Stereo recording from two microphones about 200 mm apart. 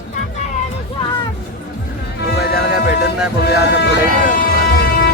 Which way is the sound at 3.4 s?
55° left (ahead or behind).